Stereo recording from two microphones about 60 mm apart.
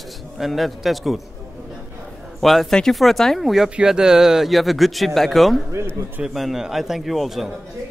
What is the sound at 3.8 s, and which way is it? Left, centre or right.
A man's voice, centre.